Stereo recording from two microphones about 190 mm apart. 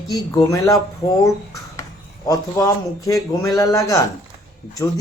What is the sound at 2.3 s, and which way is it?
Speech, 15° left (ahead or behind).